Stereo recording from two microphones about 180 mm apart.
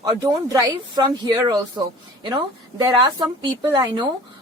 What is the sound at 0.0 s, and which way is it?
A woman's voice, 20° right (ahead or behind).